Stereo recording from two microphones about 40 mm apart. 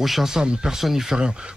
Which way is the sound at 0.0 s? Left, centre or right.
Centre.